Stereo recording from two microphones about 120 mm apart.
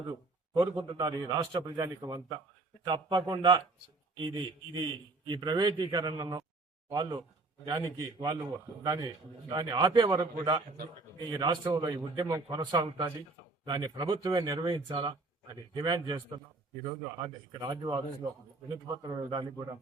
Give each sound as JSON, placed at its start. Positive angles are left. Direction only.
{"t": 0.1, "sound": "a man's voice", "side_deg": -30}